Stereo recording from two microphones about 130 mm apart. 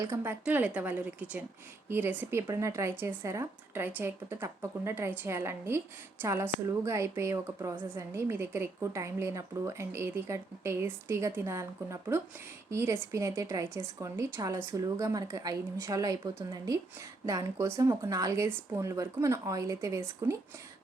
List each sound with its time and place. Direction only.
0.0 s a woman's voice: 20° right (ahead or behind)